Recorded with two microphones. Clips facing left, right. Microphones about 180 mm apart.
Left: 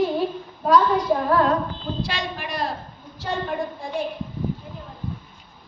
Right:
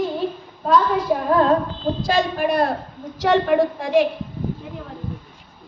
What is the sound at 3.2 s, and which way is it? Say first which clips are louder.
Speech: right 10 dB; 90° right.